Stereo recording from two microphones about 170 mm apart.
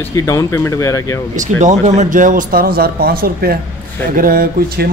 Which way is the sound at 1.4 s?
45° right (ahead or behind).